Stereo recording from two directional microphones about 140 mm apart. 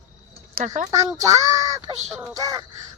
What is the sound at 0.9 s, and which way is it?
Child singing, 25° right (ahead or behind).